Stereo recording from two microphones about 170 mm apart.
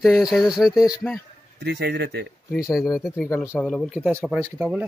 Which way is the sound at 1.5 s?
75° right (ahead or behind).